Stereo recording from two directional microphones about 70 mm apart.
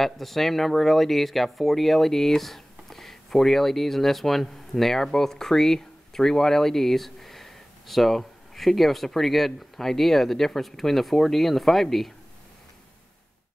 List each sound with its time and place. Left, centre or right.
0.0 s speech: centre